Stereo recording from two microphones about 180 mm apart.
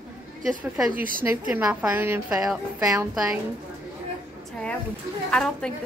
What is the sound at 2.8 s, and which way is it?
Speech, 20° right (ahead or behind).